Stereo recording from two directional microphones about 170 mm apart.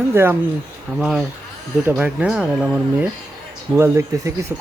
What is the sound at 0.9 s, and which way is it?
Speech, centre (ahead or behind).